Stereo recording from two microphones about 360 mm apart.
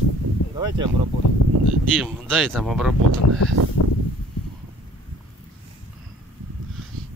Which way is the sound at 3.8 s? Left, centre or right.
Left.